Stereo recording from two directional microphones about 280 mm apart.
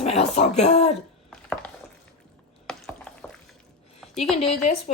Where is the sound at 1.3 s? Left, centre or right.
Centre.